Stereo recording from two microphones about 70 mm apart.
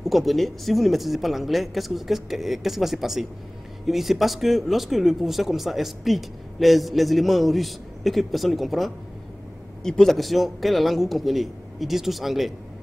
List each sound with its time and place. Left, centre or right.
0.0 s speech: centre